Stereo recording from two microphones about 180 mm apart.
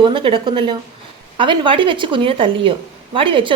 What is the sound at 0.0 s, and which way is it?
A woman's voice, 25° right (ahead or behind).